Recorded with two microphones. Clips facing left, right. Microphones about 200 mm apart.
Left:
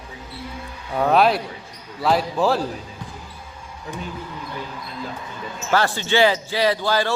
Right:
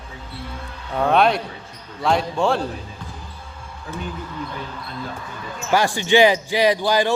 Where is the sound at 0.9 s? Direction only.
5° left (ahead or behind).